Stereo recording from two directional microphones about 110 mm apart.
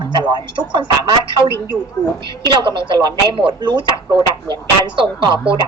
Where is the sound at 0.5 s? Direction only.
45° right (ahead or behind).